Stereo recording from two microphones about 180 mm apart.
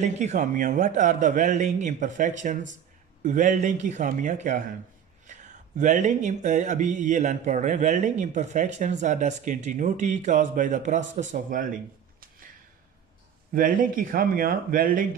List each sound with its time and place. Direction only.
0.0 s speech: 40° right (ahead or behind)
11.1 s a sound: 45° right (ahead or behind)
13.5 s speech: 50° right (ahead or behind)